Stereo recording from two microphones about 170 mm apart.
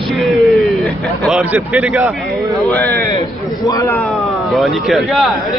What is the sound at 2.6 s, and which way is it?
Speech, 10° left (ahead or behind).